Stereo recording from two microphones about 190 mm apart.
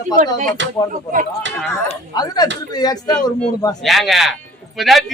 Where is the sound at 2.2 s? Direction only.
20° left (ahead or behind).